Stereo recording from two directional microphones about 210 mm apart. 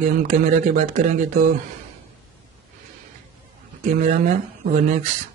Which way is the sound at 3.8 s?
35° right (ahead or behind).